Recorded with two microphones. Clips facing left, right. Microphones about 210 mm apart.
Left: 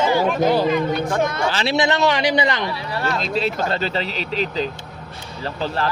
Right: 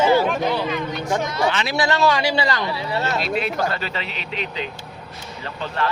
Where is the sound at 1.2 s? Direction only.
50° left (ahead or behind).